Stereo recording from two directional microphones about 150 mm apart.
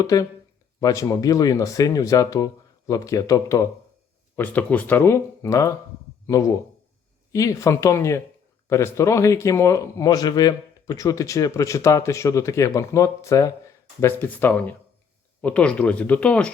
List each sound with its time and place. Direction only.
0.0 s speech: 25° left (ahead or behind)
4.4 s speech: 10° left (ahead or behind)